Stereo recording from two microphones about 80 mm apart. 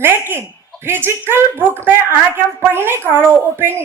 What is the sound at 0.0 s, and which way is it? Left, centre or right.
A woman's voice, right.